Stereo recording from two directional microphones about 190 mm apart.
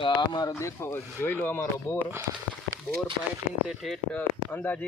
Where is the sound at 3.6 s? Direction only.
Centre (ahead or behind).